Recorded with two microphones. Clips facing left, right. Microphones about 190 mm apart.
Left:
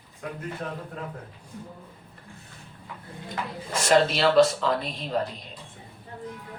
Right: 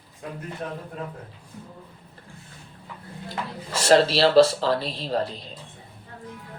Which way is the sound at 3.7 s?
30° right (ahead or behind).